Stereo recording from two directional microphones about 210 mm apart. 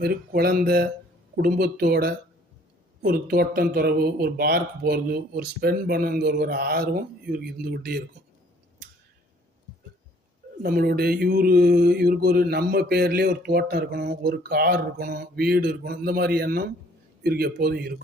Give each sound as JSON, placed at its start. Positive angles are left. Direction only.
{"t": 0.0, "sound": "mantra", "side_deg": -45}
{"t": 10.6, "sound": "mantra", "side_deg": -45}